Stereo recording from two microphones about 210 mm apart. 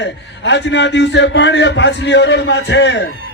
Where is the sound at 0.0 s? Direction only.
55° left (ahead or behind).